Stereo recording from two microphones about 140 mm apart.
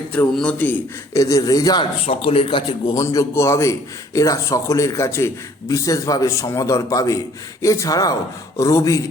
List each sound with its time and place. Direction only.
0.1 s speech: 10° left (ahead or behind)
1.1 s a man's voice: 25° left (ahead or behind)
2.0 s a man's voice: 40° left (ahead or behind)
2.9 s a man's voice: 25° left (ahead or behind)